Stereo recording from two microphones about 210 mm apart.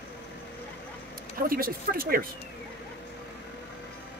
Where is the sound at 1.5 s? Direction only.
45° right (ahead or behind).